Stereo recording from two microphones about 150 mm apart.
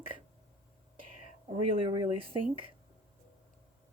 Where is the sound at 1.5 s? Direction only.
35° right (ahead or behind).